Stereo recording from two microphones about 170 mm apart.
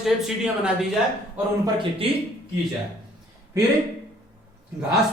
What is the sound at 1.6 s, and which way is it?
Speech, 30° right (ahead or behind).